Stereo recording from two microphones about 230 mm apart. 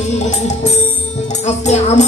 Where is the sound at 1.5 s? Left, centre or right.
Left.